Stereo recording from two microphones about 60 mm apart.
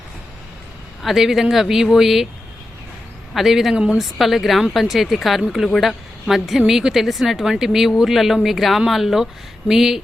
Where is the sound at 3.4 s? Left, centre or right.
Centre.